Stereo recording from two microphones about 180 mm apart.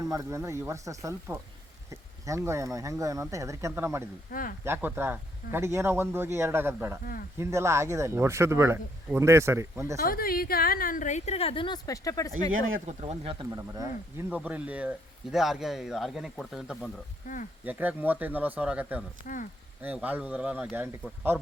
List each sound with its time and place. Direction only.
0.0 s speech: 20° right (ahead or behind)
4.3 s a woman's voice: 50° left (ahead or behind)
4.6 s speech: 10° right (ahead or behind)
7.0 s a woman's voice: 55° left (ahead or behind)
7.3 s speech: 15° right (ahead or behind)
10.0 s a woman's voice: 55° left (ahead or behind); by 12.3 s 20° left (ahead or behind)
12.5 s speech: 90° right
12.8 s speech: 40° right (ahead or behind)
13.4 s speech: 20° right (ahead or behind)